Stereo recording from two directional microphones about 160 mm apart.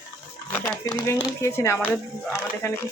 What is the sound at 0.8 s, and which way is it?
Speech, 20° left (ahead or behind).